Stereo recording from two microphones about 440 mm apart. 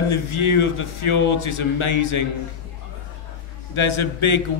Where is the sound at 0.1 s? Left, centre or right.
Left.